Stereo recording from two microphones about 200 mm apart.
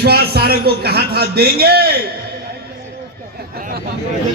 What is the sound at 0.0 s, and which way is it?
A man's voice, 50° right (ahead or behind).